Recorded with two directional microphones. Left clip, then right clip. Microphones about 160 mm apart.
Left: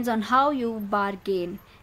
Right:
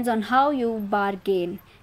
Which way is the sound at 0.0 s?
10° right (ahead or behind).